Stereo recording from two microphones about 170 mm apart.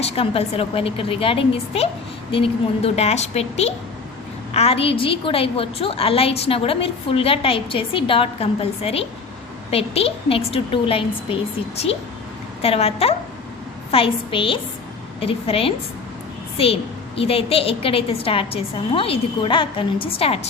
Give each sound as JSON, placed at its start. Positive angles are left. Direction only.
{"t": 0.0, "sound": "a woman's voice", "side_deg": 35}
{"t": 12.6, "sound": "a woman's voice", "side_deg": 35}
{"t": 17.2, "sound": "a woman's voice", "side_deg": 35}